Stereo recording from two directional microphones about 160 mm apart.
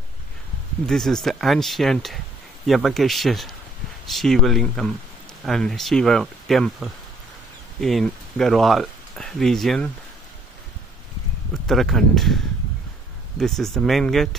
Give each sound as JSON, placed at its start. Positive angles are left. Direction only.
{"t": 0.8, "sound": "speech", "side_deg": 5}
{"t": 11.5, "sound": "speech", "side_deg": 0}
{"t": 13.4, "sound": "speech", "side_deg": 0}